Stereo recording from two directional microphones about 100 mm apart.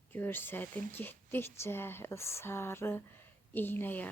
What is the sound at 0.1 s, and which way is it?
A woman's voice, 20° left (ahead or behind).